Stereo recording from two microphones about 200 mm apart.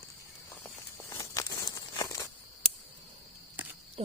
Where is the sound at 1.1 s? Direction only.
15° left (ahead or behind).